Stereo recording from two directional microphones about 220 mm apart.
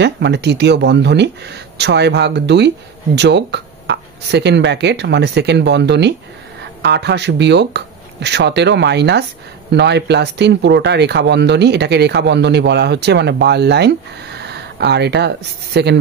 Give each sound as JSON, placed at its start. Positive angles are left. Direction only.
{"t": 0.0, "sound": "speech", "side_deg": -50}